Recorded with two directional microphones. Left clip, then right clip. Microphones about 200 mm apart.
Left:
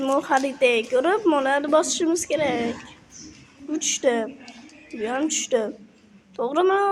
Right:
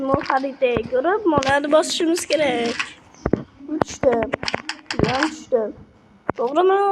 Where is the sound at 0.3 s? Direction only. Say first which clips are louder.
Even; 30° left (ahead or behind).